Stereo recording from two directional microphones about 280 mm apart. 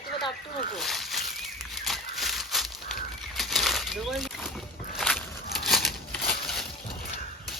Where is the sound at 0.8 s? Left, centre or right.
Centre.